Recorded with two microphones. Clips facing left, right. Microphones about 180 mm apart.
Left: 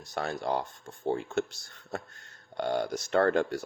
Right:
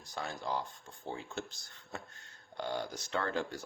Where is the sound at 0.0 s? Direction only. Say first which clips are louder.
Left 7 dB; 75° left (ahead or behind).